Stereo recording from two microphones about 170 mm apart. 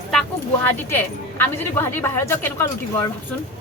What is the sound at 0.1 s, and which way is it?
Speech, 10° left (ahead or behind).